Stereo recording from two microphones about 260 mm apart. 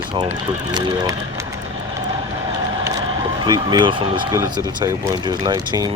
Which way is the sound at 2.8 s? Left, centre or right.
Centre.